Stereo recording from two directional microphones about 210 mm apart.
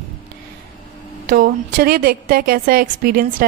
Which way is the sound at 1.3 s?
45° right (ahead or behind).